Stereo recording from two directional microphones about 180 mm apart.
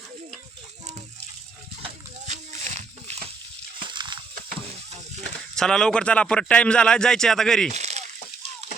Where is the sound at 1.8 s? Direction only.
40° right (ahead or behind).